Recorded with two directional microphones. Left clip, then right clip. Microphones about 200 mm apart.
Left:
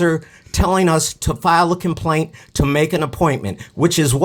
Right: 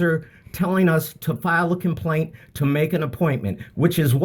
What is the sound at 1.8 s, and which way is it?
Speech, 25° left (ahead or behind).